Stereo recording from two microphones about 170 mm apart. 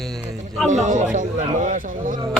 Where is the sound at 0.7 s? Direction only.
45° right (ahead or behind).